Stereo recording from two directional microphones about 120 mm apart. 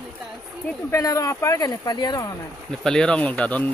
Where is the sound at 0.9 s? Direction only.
30° left (ahead or behind).